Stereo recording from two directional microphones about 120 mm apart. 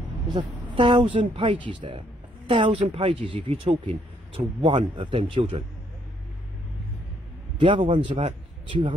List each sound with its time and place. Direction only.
0.3 s speech: 40° right (ahead or behind)
7.5 s speech: 45° right (ahead or behind)